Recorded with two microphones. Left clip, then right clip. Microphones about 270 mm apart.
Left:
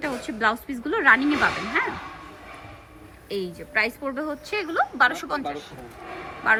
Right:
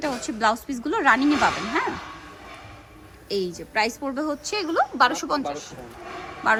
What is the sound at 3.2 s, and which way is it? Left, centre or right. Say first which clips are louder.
A woman's voice: right 3 dB; centre.